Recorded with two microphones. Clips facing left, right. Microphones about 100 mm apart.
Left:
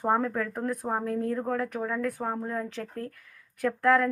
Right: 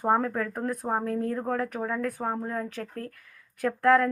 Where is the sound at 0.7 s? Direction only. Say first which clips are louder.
Right 2 dB; 15° right (ahead or behind).